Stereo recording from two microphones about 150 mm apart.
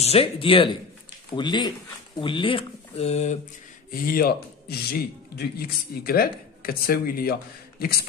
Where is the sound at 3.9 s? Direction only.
75° left (ahead or behind); by 8.1 s 90° left.